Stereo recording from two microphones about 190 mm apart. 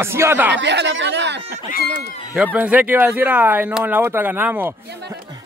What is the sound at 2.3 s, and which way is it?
Speech, 5° right (ahead or behind).